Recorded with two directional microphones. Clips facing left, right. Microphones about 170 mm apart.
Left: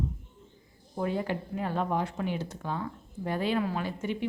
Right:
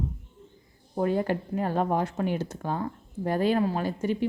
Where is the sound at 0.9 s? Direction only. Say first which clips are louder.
Right 5 dB; 45° right (ahead or behind).